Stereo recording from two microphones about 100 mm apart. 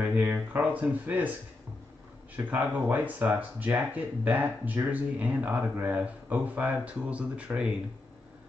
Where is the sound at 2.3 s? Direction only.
15° right (ahead or behind).